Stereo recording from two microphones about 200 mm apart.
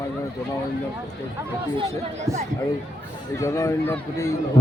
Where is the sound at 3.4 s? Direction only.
15° left (ahead or behind).